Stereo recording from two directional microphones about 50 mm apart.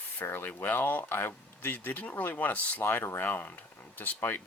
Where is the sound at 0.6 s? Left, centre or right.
Left.